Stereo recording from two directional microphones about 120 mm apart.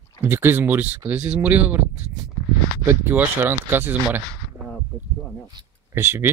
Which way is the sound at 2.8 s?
20° right (ahead or behind).